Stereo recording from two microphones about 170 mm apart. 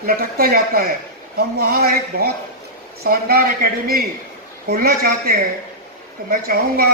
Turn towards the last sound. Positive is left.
turn(degrees=-55)  # may be behind; listen again after turning